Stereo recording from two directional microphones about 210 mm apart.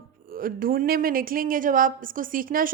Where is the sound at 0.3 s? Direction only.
45° right (ahead or behind).